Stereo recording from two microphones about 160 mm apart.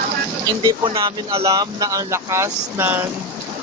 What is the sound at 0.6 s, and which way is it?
Speech, 25° right (ahead or behind).